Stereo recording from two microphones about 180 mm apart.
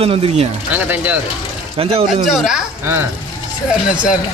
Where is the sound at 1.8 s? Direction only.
30° right (ahead or behind).